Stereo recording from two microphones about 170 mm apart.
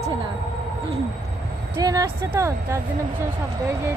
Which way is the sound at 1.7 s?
20° right (ahead or behind).